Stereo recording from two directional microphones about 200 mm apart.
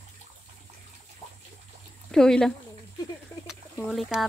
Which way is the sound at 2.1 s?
5° left (ahead or behind).